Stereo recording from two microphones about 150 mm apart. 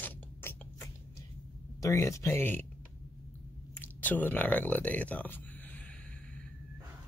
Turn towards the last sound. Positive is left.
turn(degrees=10)  # may be behind; listen again after turning